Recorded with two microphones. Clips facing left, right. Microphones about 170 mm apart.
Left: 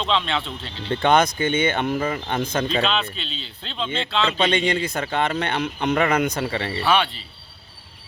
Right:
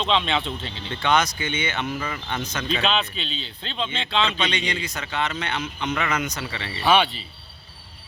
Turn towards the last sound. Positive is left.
turn(degrees=45)  # may be behind; listen again after turning